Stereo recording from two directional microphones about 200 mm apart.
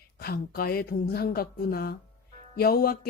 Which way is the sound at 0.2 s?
50° left (ahead or behind).